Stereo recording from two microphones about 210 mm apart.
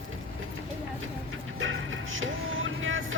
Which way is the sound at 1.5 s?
70° right (ahead or behind).